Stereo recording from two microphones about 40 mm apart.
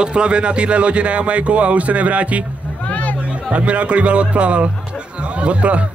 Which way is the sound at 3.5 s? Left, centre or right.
Right.